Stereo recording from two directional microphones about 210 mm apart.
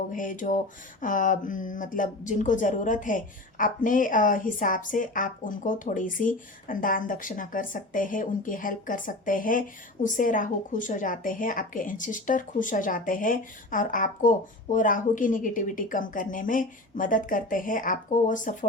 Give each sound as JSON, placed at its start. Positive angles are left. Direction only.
{"t": 0.1, "sound": "speech", "side_deg": 40}